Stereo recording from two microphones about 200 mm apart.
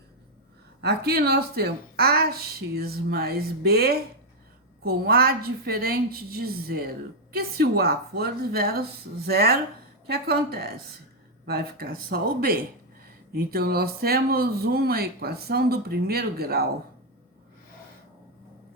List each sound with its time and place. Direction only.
0.8 s speech: 55° right (ahead or behind)